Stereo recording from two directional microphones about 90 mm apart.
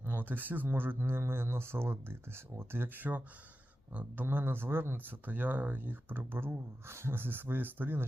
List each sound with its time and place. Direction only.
0.0 s speech: 20° right (ahead or behind)